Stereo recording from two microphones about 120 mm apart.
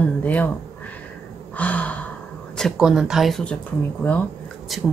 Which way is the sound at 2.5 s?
Centre (ahead or behind).